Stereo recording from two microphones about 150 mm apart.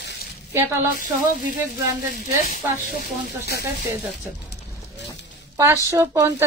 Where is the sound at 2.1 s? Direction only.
70° left (ahead or behind).